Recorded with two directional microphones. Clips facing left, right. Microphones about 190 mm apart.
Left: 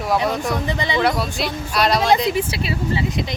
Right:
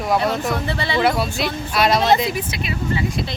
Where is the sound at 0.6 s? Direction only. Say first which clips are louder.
Even; 15° left (ahead or behind).